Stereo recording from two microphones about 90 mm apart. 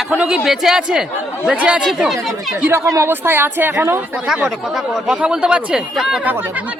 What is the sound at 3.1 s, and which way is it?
Speech, 25° right (ahead or behind).